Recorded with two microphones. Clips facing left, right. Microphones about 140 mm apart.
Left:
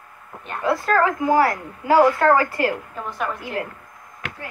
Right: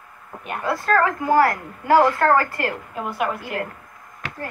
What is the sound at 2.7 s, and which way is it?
Speech, 5° right (ahead or behind).